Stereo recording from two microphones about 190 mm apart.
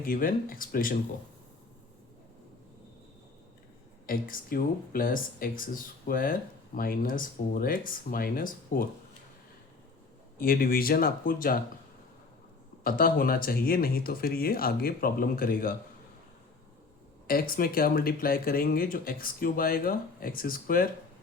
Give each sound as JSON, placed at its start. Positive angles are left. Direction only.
{"t": 0.0, "sound": "speech", "side_deg": 50}
{"t": 4.0, "sound": "speech", "side_deg": 50}
{"t": 10.3, "sound": "speech", "side_deg": 50}
{"t": 12.8, "sound": "speech", "side_deg": 50}
{"t": 17.2, "sound": "speech", "side_deg": 50}